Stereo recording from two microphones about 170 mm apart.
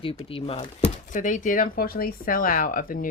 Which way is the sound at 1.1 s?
50° left (ahead or behind).